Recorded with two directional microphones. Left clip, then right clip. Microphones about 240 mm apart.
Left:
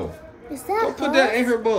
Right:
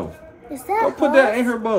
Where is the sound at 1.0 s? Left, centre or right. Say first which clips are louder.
Right 4 dB; left.